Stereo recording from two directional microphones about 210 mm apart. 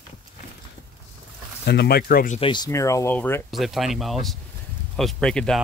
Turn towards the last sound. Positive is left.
turn(degrees=5)  # may be behind; listen again after turning